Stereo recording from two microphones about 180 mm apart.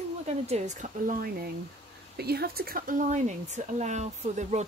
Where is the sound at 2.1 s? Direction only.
60° right (ahead or behind).